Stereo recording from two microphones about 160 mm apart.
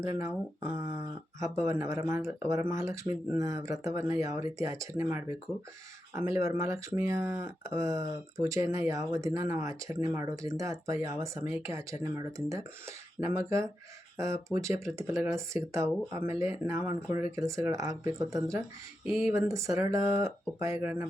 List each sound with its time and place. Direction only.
0.2 s speech: 15° right (ahead or behind)